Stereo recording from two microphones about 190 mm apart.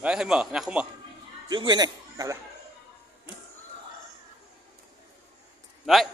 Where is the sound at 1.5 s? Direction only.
20° right (ahead or behind).